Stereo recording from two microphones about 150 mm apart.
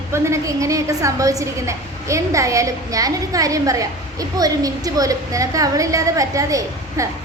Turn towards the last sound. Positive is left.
turn(degrees=-20)  # may be behind; listen again after turning